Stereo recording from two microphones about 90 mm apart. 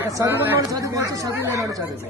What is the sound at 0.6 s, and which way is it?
Speech, 40° right (ahead or behind).